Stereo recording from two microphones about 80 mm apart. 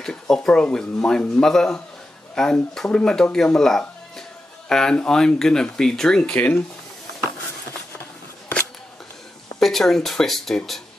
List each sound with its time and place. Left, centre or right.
0.0 s speech: centre
6.3 s speech: left
9.6 s speech: centre